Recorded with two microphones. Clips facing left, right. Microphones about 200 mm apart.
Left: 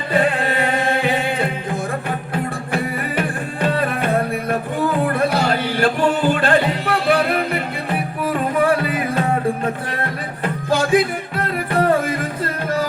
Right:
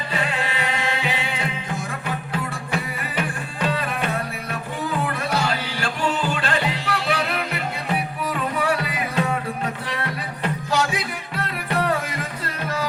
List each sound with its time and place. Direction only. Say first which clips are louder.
0.1 s music: left 9 dB; 55° left (ahead or behind)
3.2 s music: left 2 dB; 55° left (ahead or behind)
10.7 s music: left 10 dB; 50° left (ahead or behind)